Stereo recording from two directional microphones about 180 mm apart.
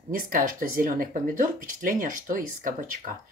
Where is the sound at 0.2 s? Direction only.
50° right (ahead or behind).